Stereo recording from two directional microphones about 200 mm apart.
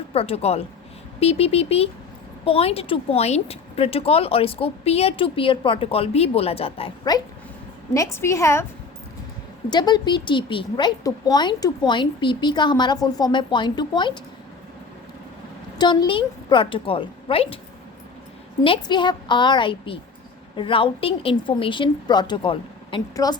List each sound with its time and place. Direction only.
0.1 s a woman's voice: 30° left (ahead or behind)
9.6 s speech: 20° left (ahead or behind)
15.8 s speech: 25° left (ahead or behind)
18.6 s speech: 25° left (ahead or behind)